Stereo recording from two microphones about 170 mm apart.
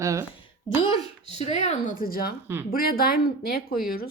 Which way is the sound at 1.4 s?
40° left (ahead or behind).